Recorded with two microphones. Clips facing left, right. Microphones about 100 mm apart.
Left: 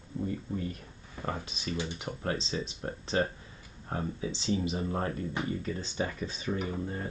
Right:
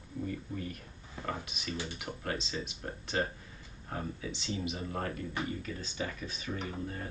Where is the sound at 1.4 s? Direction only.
30° left (ahead or behind).